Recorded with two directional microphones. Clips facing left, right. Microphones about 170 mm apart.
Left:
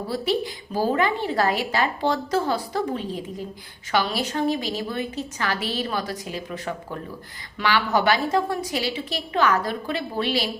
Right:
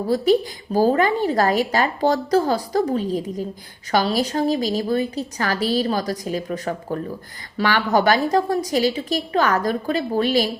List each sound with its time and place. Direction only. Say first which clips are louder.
0.1 s a woman's voice: right 8 dB; 45° right (ahead or behind)